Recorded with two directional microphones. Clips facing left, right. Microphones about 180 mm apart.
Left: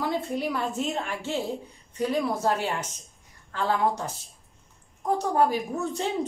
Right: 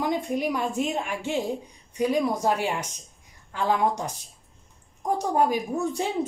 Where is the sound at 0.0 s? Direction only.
15° right (ahead or behind).